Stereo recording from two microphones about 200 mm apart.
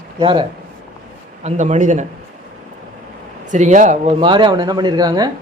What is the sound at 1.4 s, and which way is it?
Speech, 35° right (ahead or behind).